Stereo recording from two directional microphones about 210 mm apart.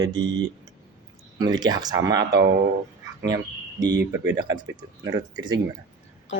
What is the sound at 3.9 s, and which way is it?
Speech, 55° right (ahead or behind).